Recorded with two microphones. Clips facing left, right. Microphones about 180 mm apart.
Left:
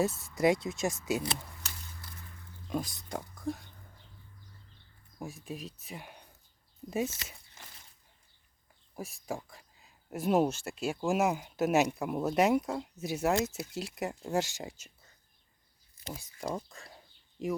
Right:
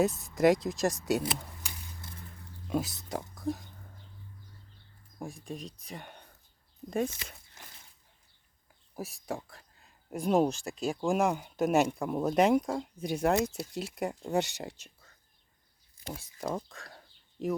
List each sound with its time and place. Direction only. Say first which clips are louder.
0.1 s speech: right 1 dB; 20° right (ahead or behind)
0.3 s speech: right 3 dB; centre (ahead or behind)
1.4 s a sound: right 1 dB; 20° right (ahead or behind)
2.7 s speech: right 3 dB; 5° right (ahead or behind)
3.3 s oink: right 2 dB; centre (ahead or behind)
5.2 s speech: right 1 dB; 5° left (ahead or behind)
9.0 s speech: right 1 dB; centre (ahead or behind)
16.6 s speech: right 2 dB; centre (ahead or behind)